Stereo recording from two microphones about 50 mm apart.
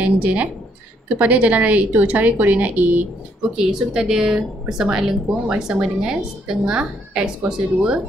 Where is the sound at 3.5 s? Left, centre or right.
Centre.